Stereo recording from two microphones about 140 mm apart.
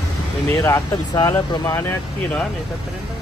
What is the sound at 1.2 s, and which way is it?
Speech, 25° left (ahead or behind).